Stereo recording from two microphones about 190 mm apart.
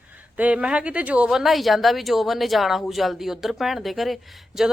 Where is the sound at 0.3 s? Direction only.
5° right (ahead or behind).